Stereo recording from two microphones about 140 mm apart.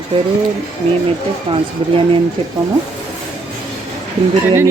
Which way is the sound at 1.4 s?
40° right (ahead or behind).